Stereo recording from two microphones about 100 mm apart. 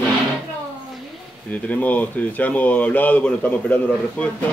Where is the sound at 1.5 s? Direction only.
15° left (ahead or behind).